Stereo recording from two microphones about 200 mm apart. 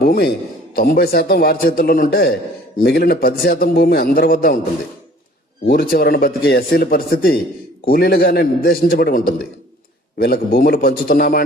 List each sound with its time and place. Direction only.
0.0 s a man's voice: 50° left (ahead or behind)
5.6 s speech: 50° left (ahead or behind)